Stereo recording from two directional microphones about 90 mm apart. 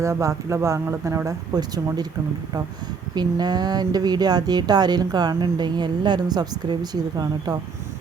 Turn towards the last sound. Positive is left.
turn(degrees=-45)  # may be behind; listen again after turning